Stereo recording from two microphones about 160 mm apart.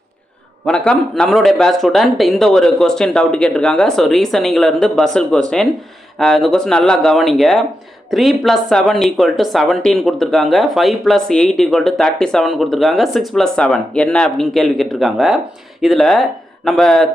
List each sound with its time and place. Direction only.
0.6 s speech: 5° left (ahead or behind)